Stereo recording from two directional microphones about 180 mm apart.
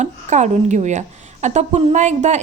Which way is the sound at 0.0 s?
40° right (ahead or behind).